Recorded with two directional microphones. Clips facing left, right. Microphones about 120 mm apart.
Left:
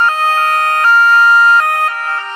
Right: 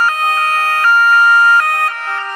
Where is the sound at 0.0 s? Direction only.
30° left (ahead or behind).